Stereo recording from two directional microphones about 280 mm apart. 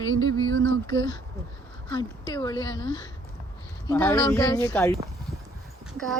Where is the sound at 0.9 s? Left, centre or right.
Centre.